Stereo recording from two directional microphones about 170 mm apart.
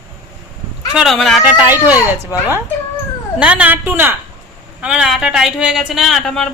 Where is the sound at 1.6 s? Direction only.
10° right (ahead or behind).